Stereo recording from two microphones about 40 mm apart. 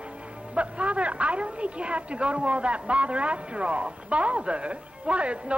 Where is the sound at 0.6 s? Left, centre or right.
Right.